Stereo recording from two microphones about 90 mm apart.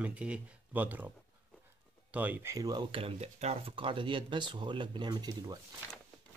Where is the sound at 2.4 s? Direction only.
35° right (ahead or behind).